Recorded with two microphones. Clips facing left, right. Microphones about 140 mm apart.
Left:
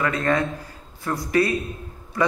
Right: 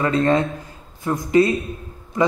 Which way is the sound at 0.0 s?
25° right (ahead or behind).